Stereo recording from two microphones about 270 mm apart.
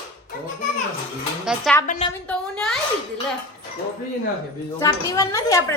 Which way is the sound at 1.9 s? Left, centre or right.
Left.